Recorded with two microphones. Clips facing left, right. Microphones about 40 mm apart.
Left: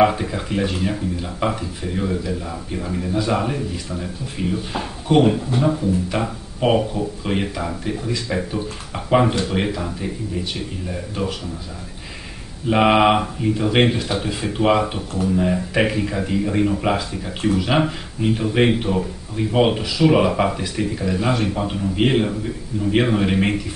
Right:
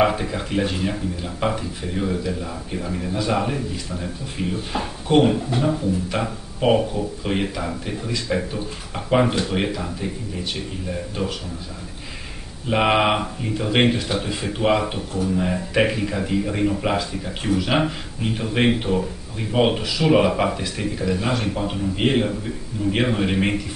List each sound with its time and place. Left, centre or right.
0.0 s speech: centre
12.6 s speech: centre